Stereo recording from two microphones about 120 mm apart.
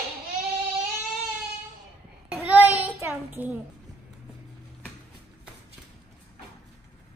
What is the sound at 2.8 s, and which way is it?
Child singing, 15° right (ahead or behind).